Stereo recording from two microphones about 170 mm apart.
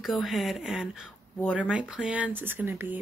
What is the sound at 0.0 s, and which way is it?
Speech, centre (ahead or behind).